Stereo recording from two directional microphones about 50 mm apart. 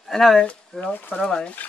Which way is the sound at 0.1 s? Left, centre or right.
Centre.